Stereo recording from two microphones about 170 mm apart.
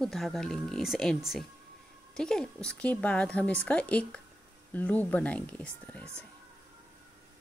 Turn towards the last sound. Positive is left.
turn(degrees=5)  # may be behind; listen again after turning